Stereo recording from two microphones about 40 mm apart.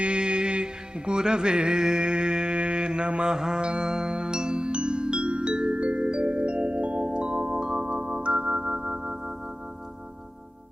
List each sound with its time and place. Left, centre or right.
0.0 s music: right